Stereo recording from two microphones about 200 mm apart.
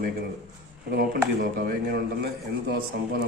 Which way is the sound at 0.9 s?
50° right (ahead or behind).